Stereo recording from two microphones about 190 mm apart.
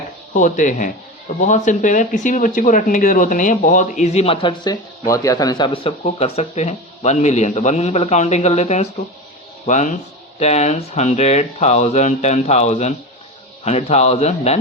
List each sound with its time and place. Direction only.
0.3 s speech: 40° left (ahead or behind)